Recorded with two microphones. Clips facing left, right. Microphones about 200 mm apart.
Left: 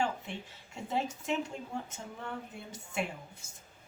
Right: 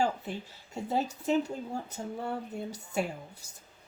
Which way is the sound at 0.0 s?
40° right (ahead or behind).